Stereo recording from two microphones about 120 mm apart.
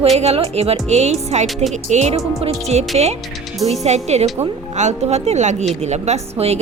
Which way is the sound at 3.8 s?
65° right (ahead or behind).